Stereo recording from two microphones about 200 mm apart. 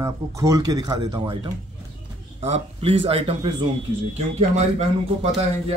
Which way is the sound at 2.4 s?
30° right (ahead or behind).